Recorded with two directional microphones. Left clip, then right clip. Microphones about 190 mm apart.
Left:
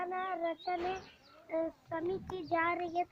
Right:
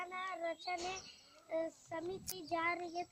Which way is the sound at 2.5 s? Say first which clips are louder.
Left 5 dB; 50° right (ahead or behind).